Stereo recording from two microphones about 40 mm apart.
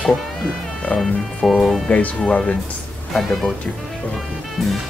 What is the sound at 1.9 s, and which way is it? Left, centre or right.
Speech, left.